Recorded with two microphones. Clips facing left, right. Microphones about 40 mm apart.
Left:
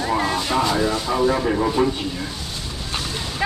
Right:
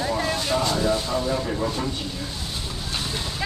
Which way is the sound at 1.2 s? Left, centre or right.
Left.